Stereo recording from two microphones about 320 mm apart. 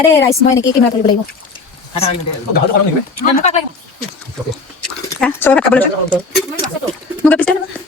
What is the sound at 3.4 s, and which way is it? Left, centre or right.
Speech, left.